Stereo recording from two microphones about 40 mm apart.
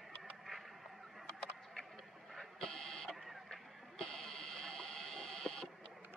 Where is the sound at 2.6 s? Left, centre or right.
Centre.